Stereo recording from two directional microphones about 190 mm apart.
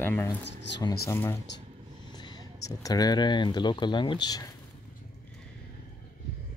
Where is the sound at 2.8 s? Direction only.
20° left (ahead or behind).